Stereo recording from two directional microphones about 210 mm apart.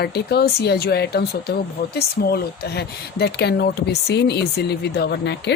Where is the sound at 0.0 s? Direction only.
50° left (ahead or behind).